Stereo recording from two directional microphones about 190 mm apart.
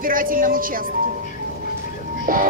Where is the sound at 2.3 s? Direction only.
45° right (ahead or behind).